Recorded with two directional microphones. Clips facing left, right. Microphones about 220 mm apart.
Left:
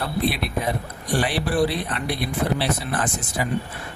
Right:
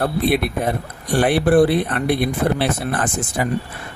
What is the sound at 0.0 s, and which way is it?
Speech, 55° right (ahead or behind).